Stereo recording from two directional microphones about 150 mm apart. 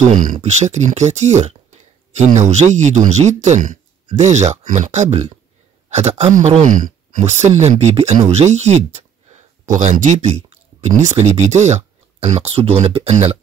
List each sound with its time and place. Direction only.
0.2 s speech: 55° right (ahead or behind)